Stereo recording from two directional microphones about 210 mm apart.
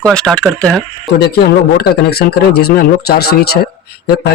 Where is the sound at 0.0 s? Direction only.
5° left (ahead or behind).